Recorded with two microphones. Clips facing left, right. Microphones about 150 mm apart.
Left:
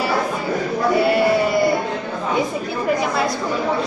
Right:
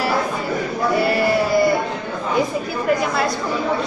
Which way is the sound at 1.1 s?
Centre (ahead or behind).